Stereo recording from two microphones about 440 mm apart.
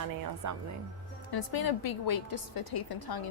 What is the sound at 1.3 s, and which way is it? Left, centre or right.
A woman's voice, left.